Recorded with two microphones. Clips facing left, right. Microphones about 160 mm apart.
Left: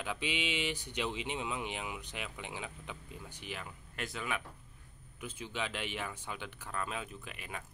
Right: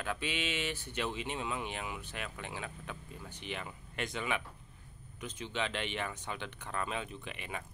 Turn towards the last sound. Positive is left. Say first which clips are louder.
# right 3 dB
turn(degrees=0)  # may be behind; listen again after turning